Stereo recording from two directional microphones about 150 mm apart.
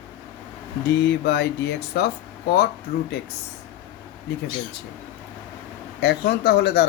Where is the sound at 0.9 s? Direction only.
90° left.